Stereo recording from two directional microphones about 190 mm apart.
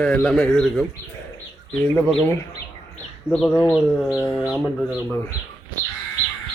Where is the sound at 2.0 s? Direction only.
Centre (ahead or behind).